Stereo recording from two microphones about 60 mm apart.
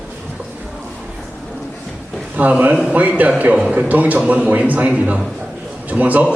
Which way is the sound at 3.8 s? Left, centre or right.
Right.